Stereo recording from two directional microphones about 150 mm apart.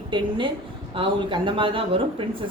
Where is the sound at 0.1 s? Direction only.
35° right (ahead or behind).